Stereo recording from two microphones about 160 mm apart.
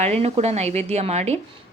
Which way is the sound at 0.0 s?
40° right (ahead or behind).